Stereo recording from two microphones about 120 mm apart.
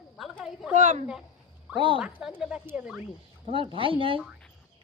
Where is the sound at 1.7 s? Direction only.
45° right (ahead or behind).